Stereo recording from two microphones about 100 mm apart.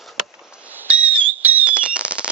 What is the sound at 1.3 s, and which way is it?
Fireworks, 15° right (ahead or behind).